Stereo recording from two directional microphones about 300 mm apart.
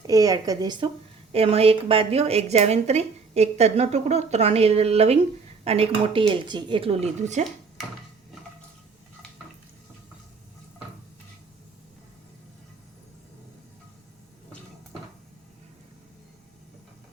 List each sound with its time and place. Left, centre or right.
0.1 s a woman's voice: centre